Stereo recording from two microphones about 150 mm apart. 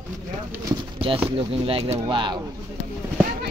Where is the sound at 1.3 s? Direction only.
40° right (ahead or behind).